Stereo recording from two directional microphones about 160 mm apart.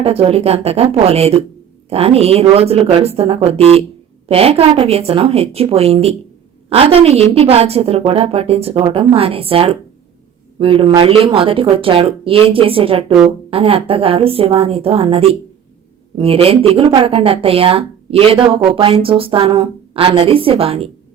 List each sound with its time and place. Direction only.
0.0 s a woman's voice: 40° right (ahead or behind)